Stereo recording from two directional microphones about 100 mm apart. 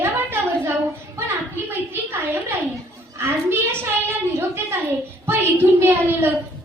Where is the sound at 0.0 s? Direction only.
25° right (ahead or behind).